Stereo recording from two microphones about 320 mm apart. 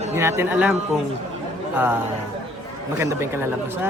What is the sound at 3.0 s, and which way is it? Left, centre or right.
Speech, centre.